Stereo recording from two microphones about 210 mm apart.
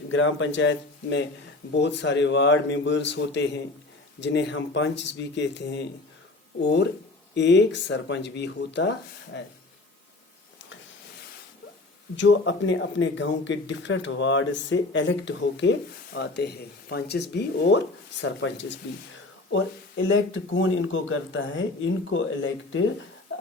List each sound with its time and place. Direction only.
0.1 s speech: 65° left (ahead or behind)
12.1 s speech: 60° left (ahead or behind)